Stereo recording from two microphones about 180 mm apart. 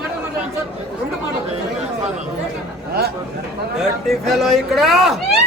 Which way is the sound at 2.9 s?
60° right (ahead or behind).